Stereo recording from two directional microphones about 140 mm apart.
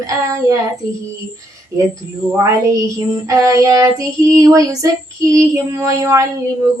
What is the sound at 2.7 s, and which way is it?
Child singing, 25° right (ahead or behind).